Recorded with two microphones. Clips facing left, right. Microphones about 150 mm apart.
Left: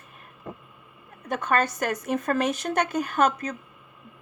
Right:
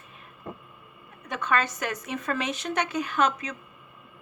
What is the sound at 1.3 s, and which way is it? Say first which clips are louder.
Speech: left 3 dB; 50° left (ahead or behind).